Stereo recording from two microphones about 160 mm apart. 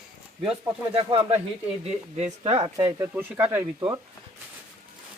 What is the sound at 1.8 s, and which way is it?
Speech, 40° right (ahead or behind).